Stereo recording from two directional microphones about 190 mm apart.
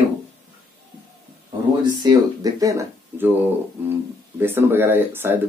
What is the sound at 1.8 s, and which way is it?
Speech, 20° right (ahead or behind).